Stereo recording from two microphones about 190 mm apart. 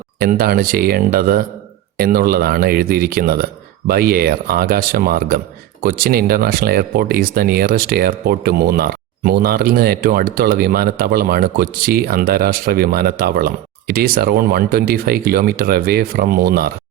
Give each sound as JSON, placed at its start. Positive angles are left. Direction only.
{"t": 0.2, "sound": "speech", "side_deg": -50}